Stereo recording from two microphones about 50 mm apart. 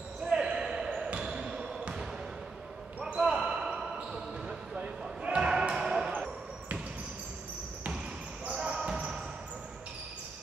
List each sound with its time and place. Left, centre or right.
0.3 s basketball bounce: centre
3.2 s basketball bounce: centre
4.5 s basketball bounce: centre
6.1 s basketball bounce: right
8.5 s basketball bounce: centre